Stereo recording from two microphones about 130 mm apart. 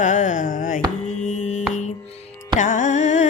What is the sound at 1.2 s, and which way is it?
Mantra, 70° left (ahead or behind).